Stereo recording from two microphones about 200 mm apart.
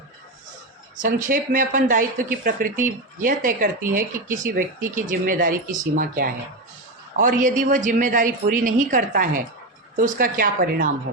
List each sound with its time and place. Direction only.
1.0 s a woman's voice: 40° right (ahead or behind)